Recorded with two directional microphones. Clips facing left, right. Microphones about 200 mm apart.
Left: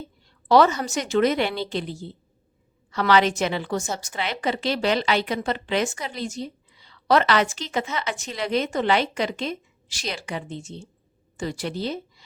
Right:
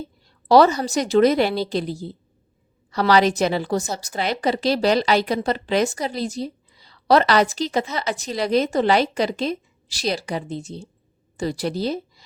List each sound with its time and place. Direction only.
0.3 s a woman's voice: 35° right (ahead or behind)